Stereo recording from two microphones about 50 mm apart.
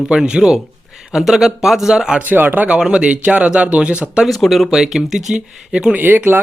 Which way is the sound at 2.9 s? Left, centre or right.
Right.